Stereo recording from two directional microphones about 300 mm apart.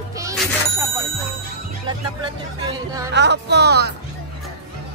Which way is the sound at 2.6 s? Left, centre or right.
Centre.